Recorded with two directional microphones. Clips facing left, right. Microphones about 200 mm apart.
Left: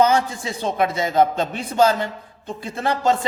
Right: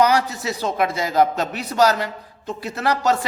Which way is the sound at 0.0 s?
25° left (ahead or behind).